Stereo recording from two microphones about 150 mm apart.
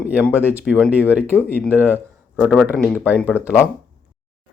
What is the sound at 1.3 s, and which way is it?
Speech, 15° left (ahead or behind).